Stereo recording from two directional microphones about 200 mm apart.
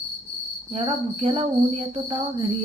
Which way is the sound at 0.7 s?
30° right (ahead or behind).